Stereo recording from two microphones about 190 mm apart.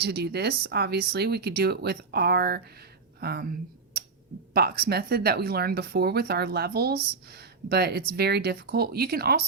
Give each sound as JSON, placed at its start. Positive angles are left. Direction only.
{"t": 0.0, "sound": "speech", "side_deg": -60}
{"t": 4.5, "sound": "speech", "side_deg": -55}